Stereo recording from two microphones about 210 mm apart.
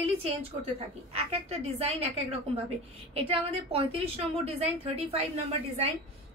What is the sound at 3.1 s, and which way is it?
A woman's voice, 25° right (ahead or behind).